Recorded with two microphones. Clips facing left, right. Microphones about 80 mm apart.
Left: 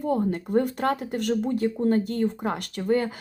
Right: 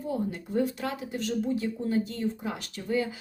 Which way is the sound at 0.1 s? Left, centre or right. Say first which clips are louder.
Left 7 dB; left.